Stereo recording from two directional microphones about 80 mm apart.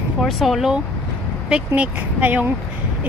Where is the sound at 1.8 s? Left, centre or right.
Right.